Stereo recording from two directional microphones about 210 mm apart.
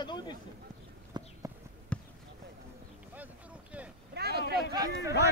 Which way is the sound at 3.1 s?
5° right (ahead or behind).